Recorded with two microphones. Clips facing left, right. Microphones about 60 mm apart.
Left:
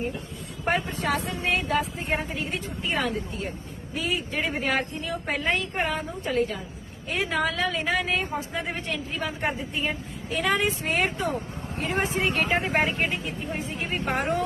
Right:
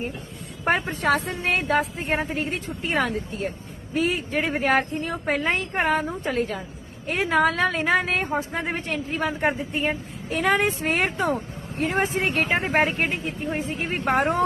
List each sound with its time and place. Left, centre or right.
0.6 s speech: right